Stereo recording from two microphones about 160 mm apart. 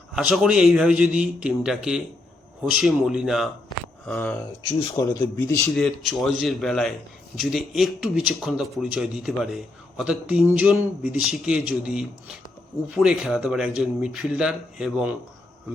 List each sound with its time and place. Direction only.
0.2 s speech: 5° right (ahead or behind)
5.4 s a man's voice: 15° left (ahead or behind)
5.7 s speech: centre (ahead or behind)